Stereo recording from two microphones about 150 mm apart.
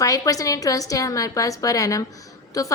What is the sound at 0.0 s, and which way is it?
A woman's voice, 25° left (ahead or behind).